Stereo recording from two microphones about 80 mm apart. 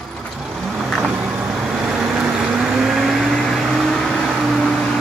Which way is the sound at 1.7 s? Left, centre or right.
Centre.